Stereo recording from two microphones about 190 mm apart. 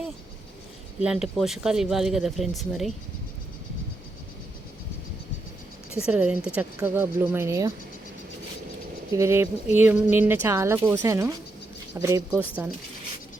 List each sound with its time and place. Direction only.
1.0 s speech: 5° right (ahead or behind)
6.0 s speech: 5° right (ahead or behind)
9.1 s speech: 15° right (ahead or behind)
12.3 s speech: 5° right (ahead or behind)